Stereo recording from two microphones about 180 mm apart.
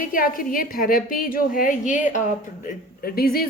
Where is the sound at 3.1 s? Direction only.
55° left (ahead or behind).